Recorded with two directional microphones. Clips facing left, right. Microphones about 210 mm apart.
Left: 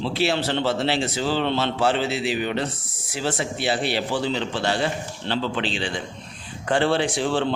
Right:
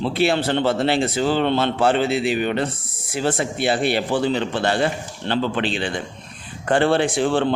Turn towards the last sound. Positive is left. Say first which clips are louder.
# right 4 dB
turn(degrees=-55)  # may be behind; listen again after turning